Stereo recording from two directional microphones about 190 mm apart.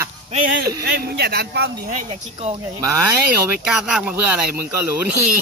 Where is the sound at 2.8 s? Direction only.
15° right (ahead or behind).